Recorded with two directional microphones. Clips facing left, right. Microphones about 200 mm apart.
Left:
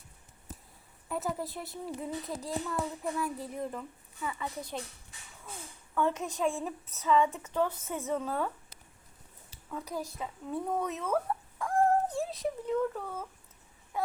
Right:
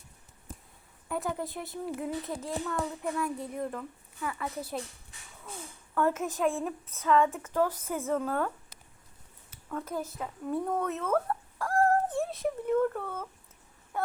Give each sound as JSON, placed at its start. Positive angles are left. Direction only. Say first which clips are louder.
{"t": 1.0, "sound": "a child's voice", "louder": "right 1 dB", "side_deg": 0}
{"t": 5.9, "sound": "a child's voice", "louder": "right 2 dB", "side_deg": -5}
{"t": 9.6, "sound": "a woman's voice", "louder": "right 3 dB", "side_deg": 0}
{"t": 11.8, "sound": "a sound", "louder": "right 1 dB", "side_deg": 0}